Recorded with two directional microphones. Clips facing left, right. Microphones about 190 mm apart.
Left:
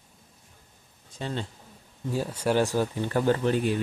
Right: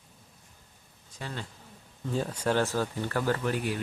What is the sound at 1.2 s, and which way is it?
Speech, 25° left (ahead or behind).